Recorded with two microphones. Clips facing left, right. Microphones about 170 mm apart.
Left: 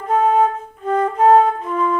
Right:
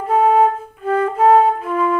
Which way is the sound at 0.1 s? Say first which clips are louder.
Right 2 dB; 10° right (ahead or behind).